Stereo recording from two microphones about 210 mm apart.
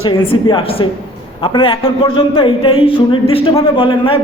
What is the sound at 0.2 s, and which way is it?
A man's voice, 25° left (ahead or behind).